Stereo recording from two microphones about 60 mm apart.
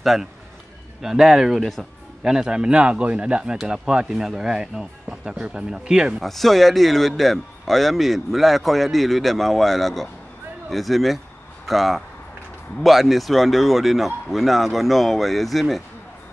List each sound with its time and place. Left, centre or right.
0.0 s speech: centre
2.2 s speech: centre
6.2 s speech: centre